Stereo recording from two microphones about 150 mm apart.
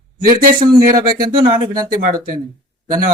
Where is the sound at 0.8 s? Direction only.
70° right (ahead or behind).